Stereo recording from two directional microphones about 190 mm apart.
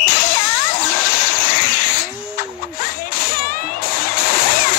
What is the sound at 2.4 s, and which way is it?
Music, 50° left (ahead or behind).